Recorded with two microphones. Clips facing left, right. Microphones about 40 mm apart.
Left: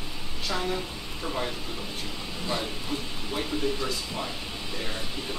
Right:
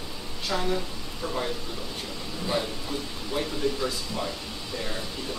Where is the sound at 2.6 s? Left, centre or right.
Centre.